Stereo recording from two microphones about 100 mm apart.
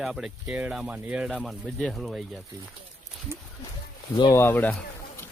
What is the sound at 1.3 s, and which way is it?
Speech, 5° left (ahead or behind).